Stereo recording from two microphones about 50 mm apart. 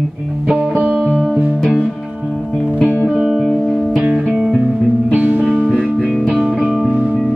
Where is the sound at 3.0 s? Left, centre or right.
Centre.